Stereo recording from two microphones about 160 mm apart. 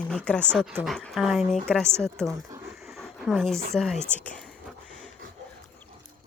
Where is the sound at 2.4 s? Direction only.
20° right (ahead or behind).